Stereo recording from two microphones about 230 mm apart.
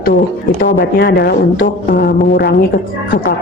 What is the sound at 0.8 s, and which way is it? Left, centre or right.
A woman's voice, left.